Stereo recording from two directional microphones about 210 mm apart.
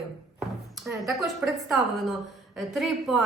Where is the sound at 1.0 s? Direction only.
Centre (ahead or behind).